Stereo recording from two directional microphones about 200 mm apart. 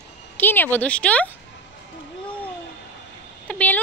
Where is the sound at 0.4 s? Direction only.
10° left (ahead or behind).